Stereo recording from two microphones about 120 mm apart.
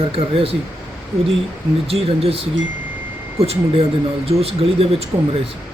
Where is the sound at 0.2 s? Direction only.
50° right (ahead or behind).